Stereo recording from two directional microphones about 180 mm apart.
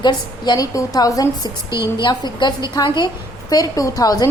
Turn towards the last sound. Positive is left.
turn(degrees=20)  # may be behind; listen again after turning